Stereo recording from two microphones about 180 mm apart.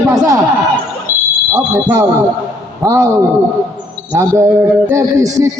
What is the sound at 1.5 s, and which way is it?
Speech, 15° right (ahead or behind).